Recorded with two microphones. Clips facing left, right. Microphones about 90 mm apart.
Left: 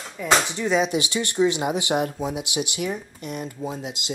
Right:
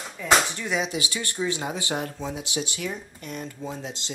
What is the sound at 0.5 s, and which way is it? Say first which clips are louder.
Speech: left 6 dB; 20° left (ahead or behind).